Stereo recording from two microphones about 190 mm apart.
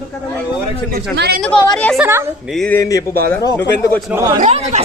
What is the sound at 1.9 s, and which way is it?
Speech, 5° right (ahead or behind).